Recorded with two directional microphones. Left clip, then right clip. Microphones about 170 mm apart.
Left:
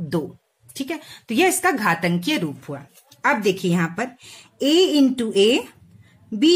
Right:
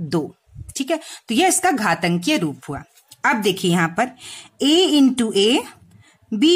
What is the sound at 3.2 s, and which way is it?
Speech, 45° right (ahead or behind).